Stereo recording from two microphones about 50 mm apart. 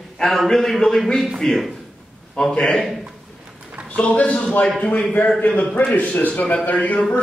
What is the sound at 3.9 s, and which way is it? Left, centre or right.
A man's voice, left.